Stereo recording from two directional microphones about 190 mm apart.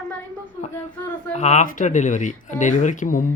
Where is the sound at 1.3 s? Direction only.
35° left (ahead or behind).